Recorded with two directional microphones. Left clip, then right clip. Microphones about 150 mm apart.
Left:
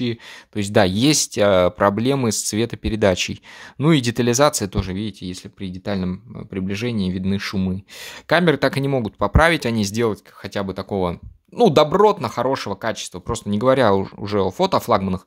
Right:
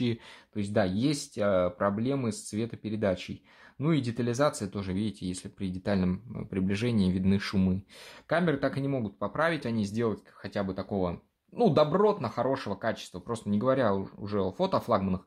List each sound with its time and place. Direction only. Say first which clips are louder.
0.6 s speech: left 11 dB; 55° left (ahead or behind)
4.9 s speech: left 6 dB; 25° left (ahead or behind)
8.0 s speech: left 11 dB; 55° left (ahead or behind)